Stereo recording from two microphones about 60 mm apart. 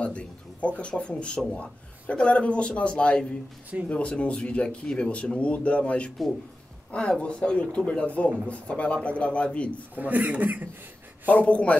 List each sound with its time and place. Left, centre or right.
0.0 s speech: centre
9.9 s a man's voice: right
11.2 s speech: left